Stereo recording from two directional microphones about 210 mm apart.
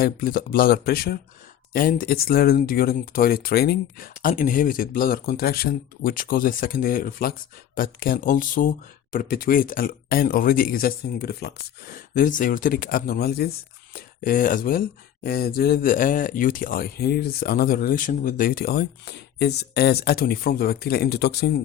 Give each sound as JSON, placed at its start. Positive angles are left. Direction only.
{"t": 0.0, "sound": "speech", "side_deg": 45}